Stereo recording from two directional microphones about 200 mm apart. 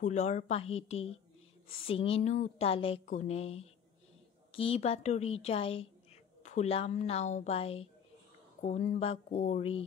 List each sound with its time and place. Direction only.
0.0 s a woman's voice: 35° left (ahead or behind)